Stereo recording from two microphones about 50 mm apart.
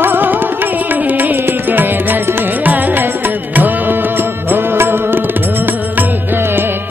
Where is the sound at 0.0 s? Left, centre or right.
Right.